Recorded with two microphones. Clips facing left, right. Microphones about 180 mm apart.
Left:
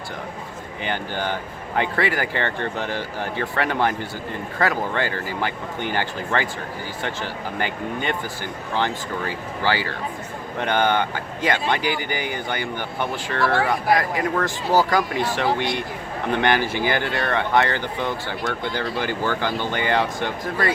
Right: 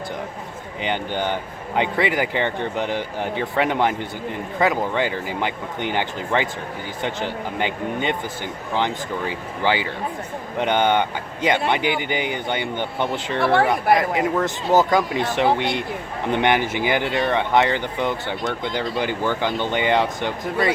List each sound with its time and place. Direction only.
0.9 s speech: 20° right (ahead or behind)